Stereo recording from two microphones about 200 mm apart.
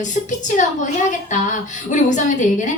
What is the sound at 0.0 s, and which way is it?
A woman's voice, 40° left (ahead or behind).